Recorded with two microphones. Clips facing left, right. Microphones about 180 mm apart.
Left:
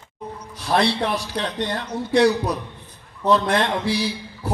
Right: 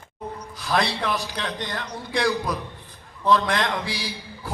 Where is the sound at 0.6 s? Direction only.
30° left (ahead or behind).